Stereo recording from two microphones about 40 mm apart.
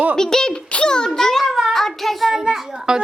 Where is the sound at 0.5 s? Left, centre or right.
Left.